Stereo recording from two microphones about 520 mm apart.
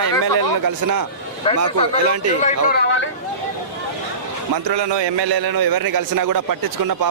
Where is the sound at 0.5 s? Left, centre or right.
Right.